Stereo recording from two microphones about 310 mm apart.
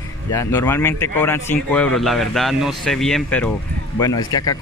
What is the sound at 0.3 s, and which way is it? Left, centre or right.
Speech, centre.